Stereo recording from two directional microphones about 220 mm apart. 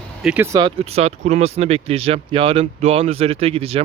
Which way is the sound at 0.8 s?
30° right (ahead or behind).